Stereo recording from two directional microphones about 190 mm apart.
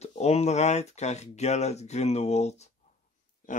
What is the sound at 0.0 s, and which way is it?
Speech, 35° left (ahead or behind).